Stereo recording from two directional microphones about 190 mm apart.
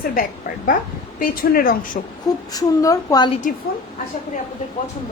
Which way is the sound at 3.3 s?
40° left (ahead or behind).